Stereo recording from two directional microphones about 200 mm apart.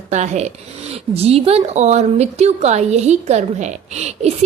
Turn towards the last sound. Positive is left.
turn(degrees=-35)  # may be behind; listen again after turning